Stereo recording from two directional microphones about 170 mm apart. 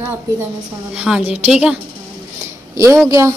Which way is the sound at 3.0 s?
20° right (ahead or behind).